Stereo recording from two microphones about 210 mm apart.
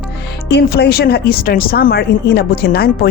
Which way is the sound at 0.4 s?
55° left (ahead or behind).